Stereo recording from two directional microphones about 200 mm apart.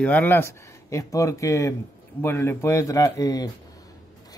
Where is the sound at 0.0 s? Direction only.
10° left (ahead or behind).